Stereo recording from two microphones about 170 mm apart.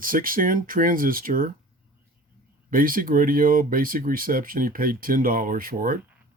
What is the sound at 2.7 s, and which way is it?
Speech, 55° right (ahead or behind).